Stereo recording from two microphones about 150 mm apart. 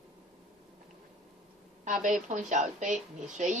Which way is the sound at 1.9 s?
60° right (ahead or behind).